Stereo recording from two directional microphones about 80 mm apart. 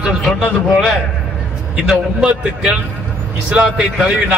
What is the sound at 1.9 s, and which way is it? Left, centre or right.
A man's voice, centre.